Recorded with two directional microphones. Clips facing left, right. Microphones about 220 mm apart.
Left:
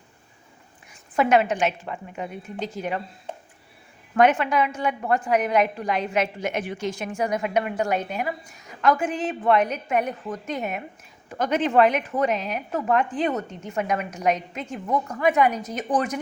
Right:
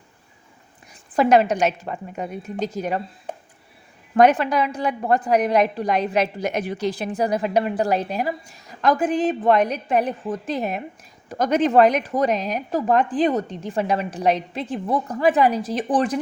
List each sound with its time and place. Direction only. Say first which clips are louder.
1.1 s a woman's voice: right 3 dB; 35° right (ahead or behind)
4.1 s a woman's voice: right 3 dB; 35° right (ahead or behind)